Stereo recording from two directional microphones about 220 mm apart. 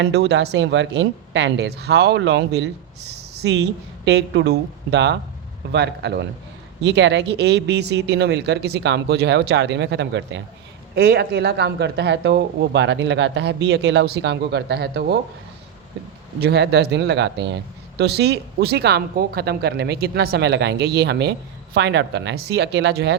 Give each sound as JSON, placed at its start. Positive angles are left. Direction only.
{"t": 0.0, "sound": "speech", "side_deg": -50}
{"t": 16.4, "sound": "speech", "side_deg": -50}